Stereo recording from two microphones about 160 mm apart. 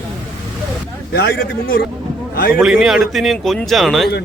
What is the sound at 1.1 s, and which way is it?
A man's voice, 80° left.